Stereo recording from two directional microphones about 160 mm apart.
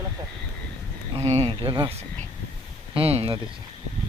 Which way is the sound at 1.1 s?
40° right (ahead or behind).